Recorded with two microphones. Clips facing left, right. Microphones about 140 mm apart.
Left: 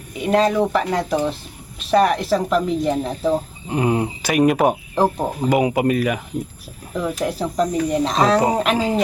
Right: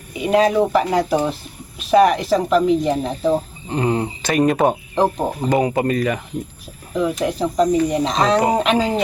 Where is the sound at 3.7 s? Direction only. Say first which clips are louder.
Even; 10° left (ahead or behind).